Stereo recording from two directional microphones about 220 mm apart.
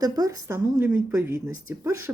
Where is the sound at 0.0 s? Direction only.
15° right (ahead or behind).